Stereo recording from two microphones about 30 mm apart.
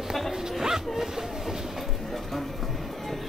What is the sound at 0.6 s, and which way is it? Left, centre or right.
Music, centre.